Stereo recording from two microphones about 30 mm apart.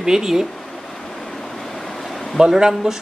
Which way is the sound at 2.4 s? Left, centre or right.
Centre.